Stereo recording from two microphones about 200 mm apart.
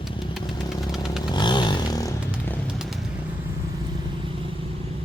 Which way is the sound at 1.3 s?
20° left (ahead or behind).